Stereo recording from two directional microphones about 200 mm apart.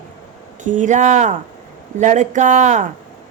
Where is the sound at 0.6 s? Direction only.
40° right (ahead or behind).